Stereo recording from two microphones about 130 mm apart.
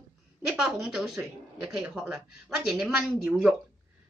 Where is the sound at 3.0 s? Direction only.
5° left (ahead or behind).